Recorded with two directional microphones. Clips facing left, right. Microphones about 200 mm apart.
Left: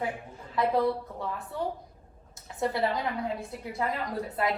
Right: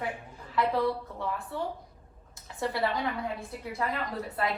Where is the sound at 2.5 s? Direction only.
20° left (ahead or behind).